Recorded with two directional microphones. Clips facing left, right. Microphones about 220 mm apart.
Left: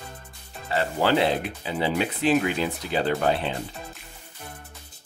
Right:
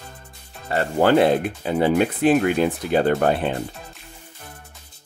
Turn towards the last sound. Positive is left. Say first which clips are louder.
# right 5 dB
turn(degrees=-50)  # may be behind; listen again after turning